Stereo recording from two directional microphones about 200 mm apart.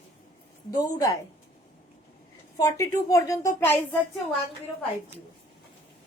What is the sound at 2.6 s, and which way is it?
A woman's voice, 15° left (ahead or behind).